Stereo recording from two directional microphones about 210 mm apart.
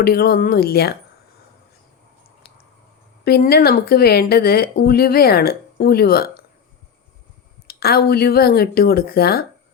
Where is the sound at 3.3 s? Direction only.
50° left (ahead or behind).